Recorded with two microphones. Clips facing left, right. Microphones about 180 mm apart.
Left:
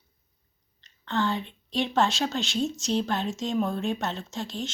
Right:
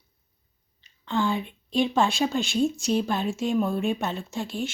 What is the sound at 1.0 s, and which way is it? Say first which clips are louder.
Speech: right 2 dB; 10° right (ahead or behind).